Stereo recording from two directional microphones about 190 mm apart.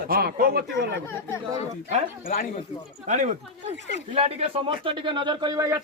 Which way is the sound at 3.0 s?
40° right (ahead or behind).